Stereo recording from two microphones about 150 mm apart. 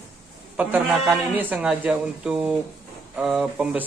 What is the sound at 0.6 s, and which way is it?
A man's voice, 10° right (ahead or behind).